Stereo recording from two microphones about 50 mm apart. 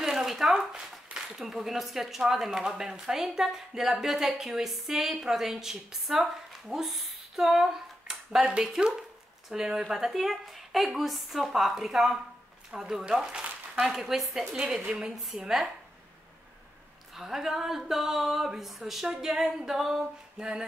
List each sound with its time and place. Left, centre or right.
0.0 s a sound: centre
1.1 s speech: centre
13.9 s speech: centre
17.1 s speech: centre